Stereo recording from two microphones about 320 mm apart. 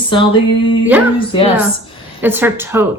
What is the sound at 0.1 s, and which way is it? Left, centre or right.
Speech, centre.